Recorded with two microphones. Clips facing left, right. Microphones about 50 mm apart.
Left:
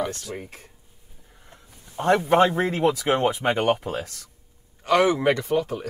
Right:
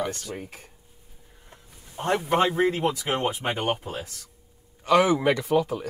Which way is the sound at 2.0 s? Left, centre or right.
Left.